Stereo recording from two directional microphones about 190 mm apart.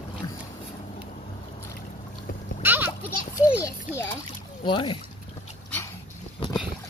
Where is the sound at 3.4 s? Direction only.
15° left (ahead or behind).